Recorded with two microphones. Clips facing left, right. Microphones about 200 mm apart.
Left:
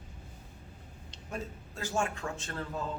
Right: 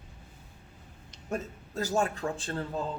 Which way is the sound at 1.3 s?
40° right (ahead or behind).